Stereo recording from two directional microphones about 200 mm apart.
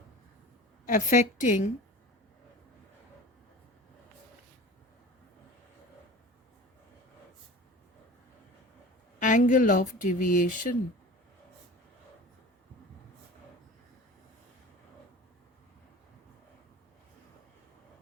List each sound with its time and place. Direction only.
0.9 s speech: 40° left (ahead or behind)
9.1 s speech: 40° left (ahead or behind)